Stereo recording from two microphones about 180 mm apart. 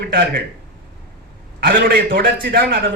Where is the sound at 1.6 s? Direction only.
50° right (ahead or behind).